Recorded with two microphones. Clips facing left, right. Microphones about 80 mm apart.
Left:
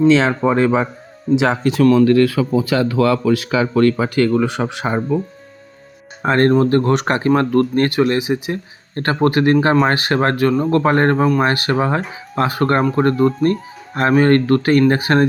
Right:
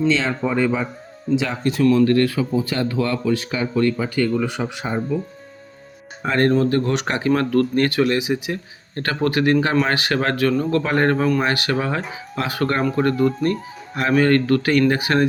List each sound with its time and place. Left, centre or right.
0.1 s speech: left
0.5 s speech: left
1.4 s speech: left
6.2 s speech: left